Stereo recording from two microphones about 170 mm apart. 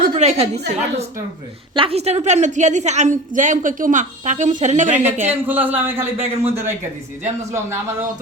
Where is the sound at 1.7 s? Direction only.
35° right (ahead or behind).